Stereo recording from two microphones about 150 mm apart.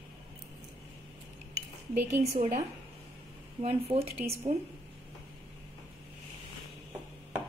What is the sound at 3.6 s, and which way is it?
Speech, 45° right (ahead or behind).